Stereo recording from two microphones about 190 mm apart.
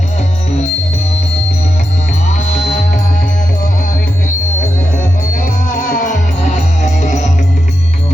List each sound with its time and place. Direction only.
2.3 s music: 35° left (ahead or behind)
5.3 s music: 45° left (ahead or behind)